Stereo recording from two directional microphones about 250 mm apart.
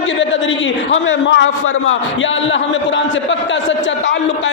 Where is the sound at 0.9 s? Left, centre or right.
Left.